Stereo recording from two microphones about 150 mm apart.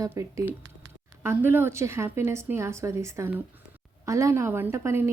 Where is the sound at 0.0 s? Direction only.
20° right (ahead or behind).